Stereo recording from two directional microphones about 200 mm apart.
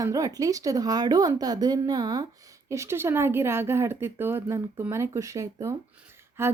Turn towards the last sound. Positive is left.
turn(degrees=-10)  # may be behind; listen again after turning